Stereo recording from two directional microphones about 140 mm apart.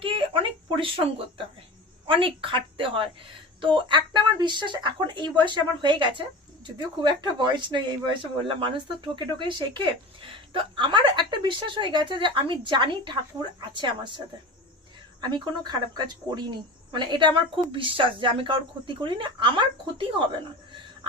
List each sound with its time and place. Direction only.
0.0 s a sound: 40° right (ahead or behind)
2.0 s speech: 40° right (ahead or behind)
15.2 s speech: 30° right (ahead or behind)